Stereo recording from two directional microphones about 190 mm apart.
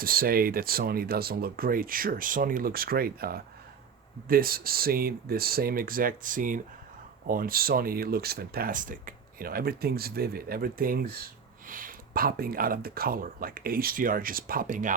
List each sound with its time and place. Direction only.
0.0 s speech: 50° right (ahead or behind)